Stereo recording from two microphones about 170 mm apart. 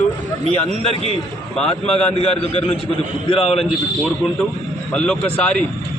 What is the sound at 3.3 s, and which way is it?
Speech, 35° left (ahead or behind).